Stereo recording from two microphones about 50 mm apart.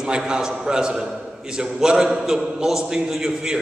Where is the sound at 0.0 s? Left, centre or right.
Centre.